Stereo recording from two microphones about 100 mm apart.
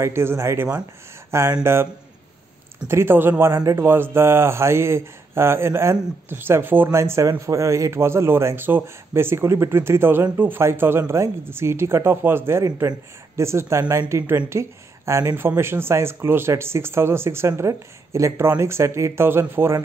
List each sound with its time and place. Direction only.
0.0 s a man's voice: 25° right (ahead or behind)
2.9 s a man's voice: 25° right (ahead or behind)